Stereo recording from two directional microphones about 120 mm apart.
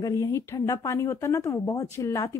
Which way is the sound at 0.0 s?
30° left (ahead or behind).